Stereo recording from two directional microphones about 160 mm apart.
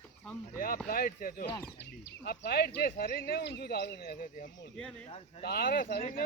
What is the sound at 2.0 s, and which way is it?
Speech, 85° left.